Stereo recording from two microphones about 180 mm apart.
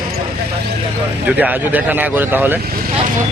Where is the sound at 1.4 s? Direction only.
10° right (ahead or behind).